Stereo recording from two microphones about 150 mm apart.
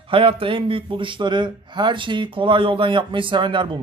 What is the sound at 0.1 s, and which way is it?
A man's voice, 35° right (ahead or behind).